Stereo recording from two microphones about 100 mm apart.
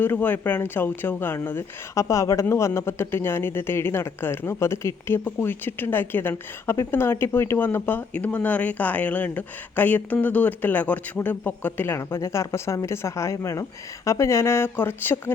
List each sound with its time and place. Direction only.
0.0 s speech: 20° left (ahead or behind)